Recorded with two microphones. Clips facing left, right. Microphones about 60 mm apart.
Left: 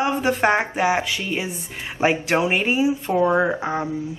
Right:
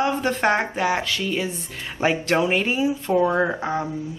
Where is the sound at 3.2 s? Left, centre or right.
Centre.